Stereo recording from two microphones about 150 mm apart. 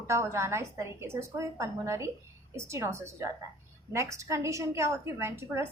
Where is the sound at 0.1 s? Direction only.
20° right (ahead or behind).